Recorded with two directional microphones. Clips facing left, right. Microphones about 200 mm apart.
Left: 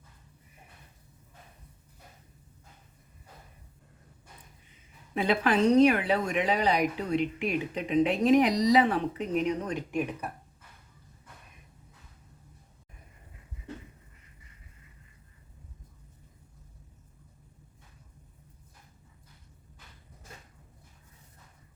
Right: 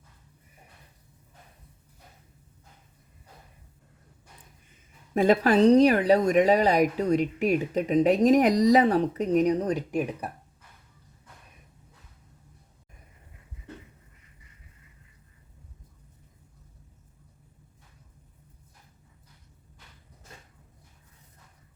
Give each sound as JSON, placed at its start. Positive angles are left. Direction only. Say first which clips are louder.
{"t": 5.1, "sound": "speech", "louder": "right 6 dB", "side_deg": -45}